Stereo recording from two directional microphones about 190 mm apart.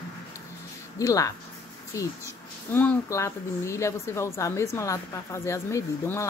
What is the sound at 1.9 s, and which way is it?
Speech, 15° left (ahead or behind).